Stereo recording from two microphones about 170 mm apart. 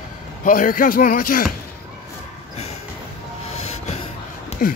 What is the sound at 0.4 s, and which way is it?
Speech, 55° left (ahead or behind).